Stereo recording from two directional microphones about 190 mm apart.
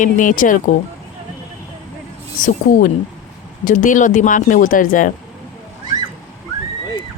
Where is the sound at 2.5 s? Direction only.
45° left (ahead or behind).